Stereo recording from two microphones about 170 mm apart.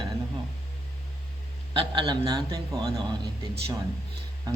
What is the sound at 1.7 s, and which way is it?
A man's voice, 30° right (ahead or behind).